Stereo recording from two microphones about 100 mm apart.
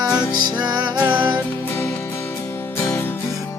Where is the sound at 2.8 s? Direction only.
20° left (ahead or behind).